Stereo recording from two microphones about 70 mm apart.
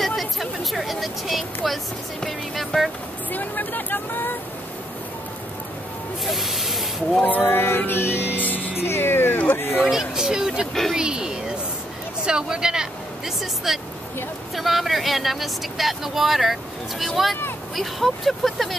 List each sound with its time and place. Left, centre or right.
0.0 s speech: centre
3.3 s speech: left
6.2 s speech: centre
7.2 s speech: left
7.4 s music: left
8.8 s speech: left
9.8 s speech: centre
10.7 s speech: centre
11.0 s speech: centre